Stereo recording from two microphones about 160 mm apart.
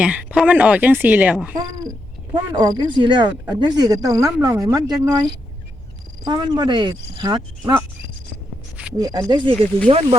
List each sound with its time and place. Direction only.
0.0 s speech: 10° right (ahead or behind)
2.3 s speech: 25° right (ahead or behind)
6.2 s speech: 25° right (ahead or behind)
9.0 s speech: 20° right (ahead or behind); by 10.2 s 40° right (ahead or behind)